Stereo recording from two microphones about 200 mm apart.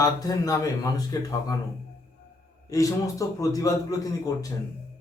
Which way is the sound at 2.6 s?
15° left (ahead or behind).